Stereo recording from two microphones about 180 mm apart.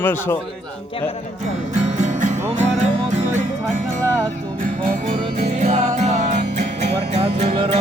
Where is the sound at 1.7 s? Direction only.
40° right (ahead or behind).